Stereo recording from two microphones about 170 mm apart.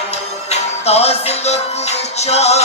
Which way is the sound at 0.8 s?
35° left (ahead or behind).